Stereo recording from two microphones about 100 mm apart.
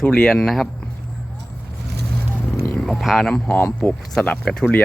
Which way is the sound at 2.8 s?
Centre (ahead or behind).